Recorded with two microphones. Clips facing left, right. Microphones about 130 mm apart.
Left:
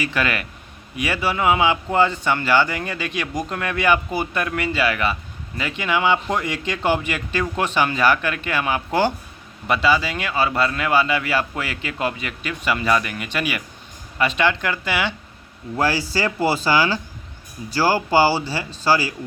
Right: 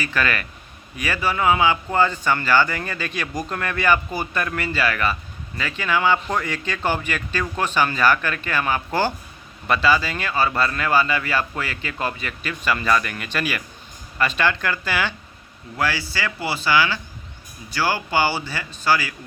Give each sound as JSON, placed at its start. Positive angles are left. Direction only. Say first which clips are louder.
{"t": 0.0, "sound": "speech", "louder": "left 1 dB", "side_deg": 15}
{"t": 15.7, "sound": "speech", "louder": "left 4 dB", "side_deg": 40}